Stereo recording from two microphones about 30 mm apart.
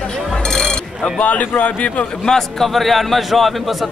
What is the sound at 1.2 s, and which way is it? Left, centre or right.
Speech, left.